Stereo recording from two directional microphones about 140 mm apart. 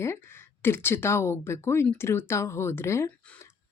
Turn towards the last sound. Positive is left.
turn(degrees=20)  # may be behind; listen again after turning